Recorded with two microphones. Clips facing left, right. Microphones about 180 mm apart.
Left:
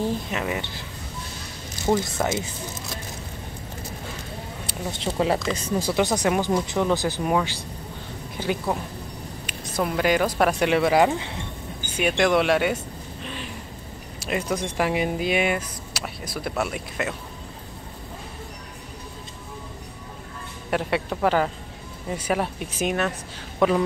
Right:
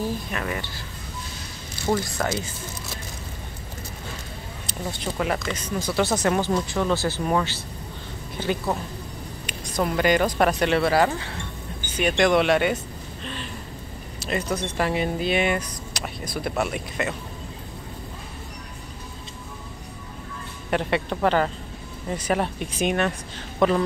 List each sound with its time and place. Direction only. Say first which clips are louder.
0.0 s speech: left 2 dB; 20° left (ahead or behind)
1.9 s speech: left 2 dB; 20° left (ahead or behind)
4.9 s speech: left 4 dB; 25° left (ahead or behind)
5.9 s speech: right 1 dB; 15° left (ahead or behind)
9.8 s speech: right 1 dB; 5° left (ahead or behind); by 11.4 s 20° left (ahead or behind)
12.0 s speech: right 1 dB; 5° left (ahead or behind)
20.7 s speech: right 1 dB; 5° left (ahead or behind)